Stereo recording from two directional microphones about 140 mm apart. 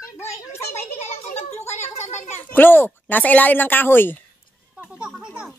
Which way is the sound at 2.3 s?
15° left (ahead or behind).